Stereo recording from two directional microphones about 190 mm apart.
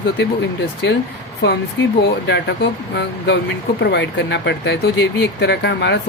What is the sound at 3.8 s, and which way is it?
Speech, 65° left (ahead or behind).